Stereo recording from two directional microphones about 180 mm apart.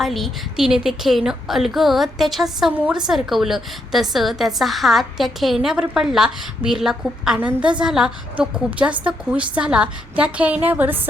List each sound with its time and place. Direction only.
0.0 s a woman's voice: centre (ahead or behind)